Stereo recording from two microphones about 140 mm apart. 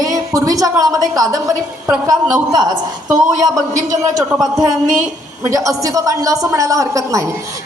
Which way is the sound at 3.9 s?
25° right (ahead or behind).